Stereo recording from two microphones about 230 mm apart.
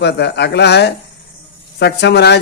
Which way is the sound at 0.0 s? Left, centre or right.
Left.